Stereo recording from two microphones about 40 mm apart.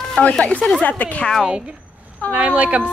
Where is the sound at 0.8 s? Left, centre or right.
Left.